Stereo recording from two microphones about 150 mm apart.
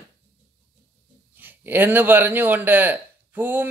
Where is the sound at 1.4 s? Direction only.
15° right (ahead or behind).